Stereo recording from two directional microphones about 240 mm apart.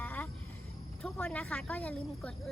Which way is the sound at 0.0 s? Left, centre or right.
Centre.